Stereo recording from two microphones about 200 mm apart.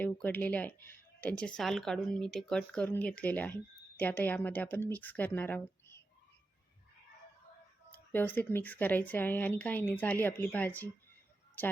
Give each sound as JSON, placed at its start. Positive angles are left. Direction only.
{"t": 0.0, "sound": "speech", "side_deg": 10}
{"t": 7.9, "sound": "speech", "side_deg": 10}